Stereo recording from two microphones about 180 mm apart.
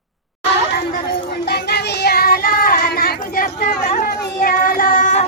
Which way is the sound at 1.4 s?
65° left (ahead or behind).